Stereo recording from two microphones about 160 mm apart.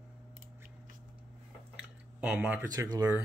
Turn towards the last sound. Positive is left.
turn(degrees=-20)  # may be behind; listen again after turning